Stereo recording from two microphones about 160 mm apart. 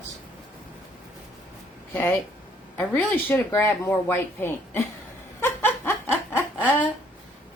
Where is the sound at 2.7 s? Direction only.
15° left (ahead or behind).